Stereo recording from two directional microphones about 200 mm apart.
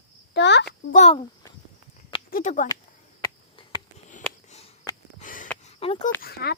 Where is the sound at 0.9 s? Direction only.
35° left (ahead or behind).